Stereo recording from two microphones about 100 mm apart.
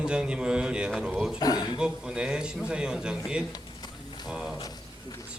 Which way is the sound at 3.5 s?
45° left (ahead or behind).